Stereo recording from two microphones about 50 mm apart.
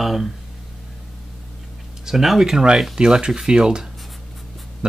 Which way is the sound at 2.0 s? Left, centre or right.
Centre.